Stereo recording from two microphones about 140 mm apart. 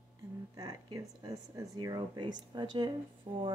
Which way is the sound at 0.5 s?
30° right (ahead or behind).